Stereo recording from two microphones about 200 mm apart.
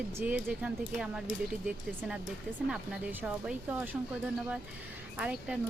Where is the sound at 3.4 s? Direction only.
5° right (ahead or behind).